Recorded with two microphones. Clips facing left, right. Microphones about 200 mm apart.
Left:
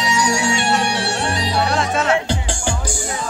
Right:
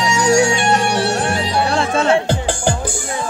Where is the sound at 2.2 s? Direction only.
55° right (ahead or behind).